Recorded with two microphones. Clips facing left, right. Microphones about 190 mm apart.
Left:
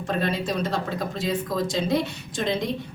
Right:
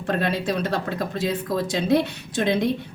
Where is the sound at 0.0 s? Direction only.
60° right (ahead or behind).